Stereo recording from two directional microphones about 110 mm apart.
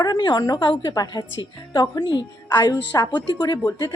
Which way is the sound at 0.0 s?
40° left (ahead or behind).